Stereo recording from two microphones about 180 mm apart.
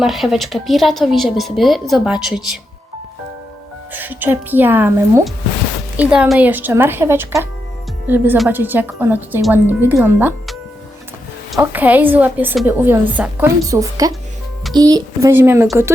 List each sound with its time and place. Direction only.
0.0 s a woman's voice: centre (ahead or behind)
3.9 s speech: 10° right (ahead or behind)
11.6 s speech: 10° right (ahead or behind)